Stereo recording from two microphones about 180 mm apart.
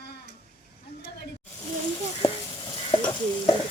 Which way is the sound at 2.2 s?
25° left (ahead or behind).